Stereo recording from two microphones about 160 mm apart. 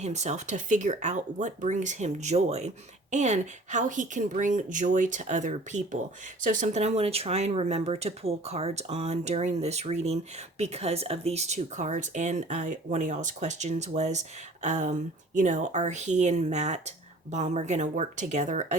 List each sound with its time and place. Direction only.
0.0 s speech: 45° right (ahead or behind)